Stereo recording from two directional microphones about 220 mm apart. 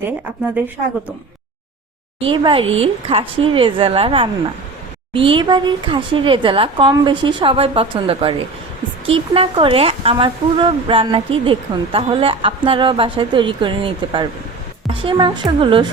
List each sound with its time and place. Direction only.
2.2 s speech: 25° right (ahead or behind)